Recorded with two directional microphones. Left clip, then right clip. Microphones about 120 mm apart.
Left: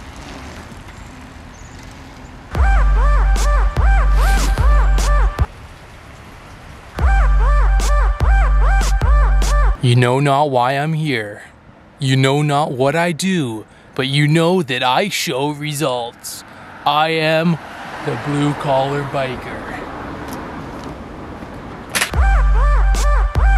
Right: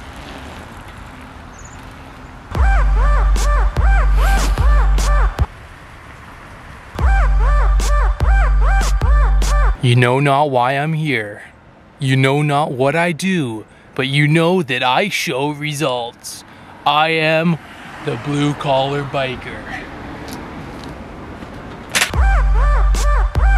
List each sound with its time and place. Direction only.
2.5 s music: centre (ahead or behind)
7.0 s music: centre (ahead or behind)
12.0 s speech: 5° left (ahead or behind)
18.2 s speech: 60° left (ahead or behind)
19.1 s speech: 5° left (ahead or behind)
20.2 s vehicle: 10° left (ahead or behind)
21.9 s music: 5° right (ahead or behind)